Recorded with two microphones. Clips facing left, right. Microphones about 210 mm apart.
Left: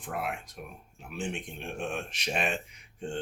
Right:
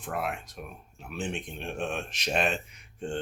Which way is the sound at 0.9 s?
10° left (ahead or behind).